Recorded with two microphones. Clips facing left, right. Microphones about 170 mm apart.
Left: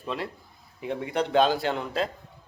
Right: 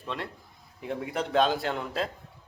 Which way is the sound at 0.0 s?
5° left (ahead or behind).